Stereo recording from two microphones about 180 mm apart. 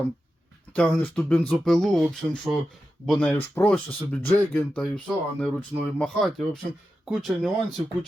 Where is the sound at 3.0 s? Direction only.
5° left (ahead or behind).